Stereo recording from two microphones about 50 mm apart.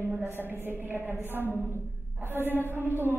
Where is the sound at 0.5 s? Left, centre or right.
Right.